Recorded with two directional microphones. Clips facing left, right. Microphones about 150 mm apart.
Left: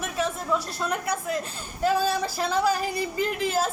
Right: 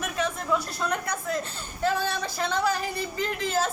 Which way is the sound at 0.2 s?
5° left (ahead or behind).